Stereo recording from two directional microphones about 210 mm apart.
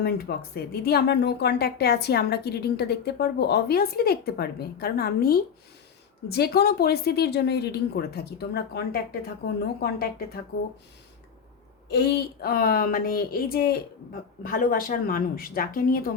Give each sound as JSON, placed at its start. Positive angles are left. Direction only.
{"t": 0.0, "sound": "speech", "side_deg": 50}
{"t": 11.9, "sound": "speech", "side_deg": 50}